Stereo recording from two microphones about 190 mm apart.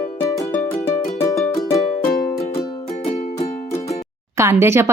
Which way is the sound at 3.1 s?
25° left (ahead or behind).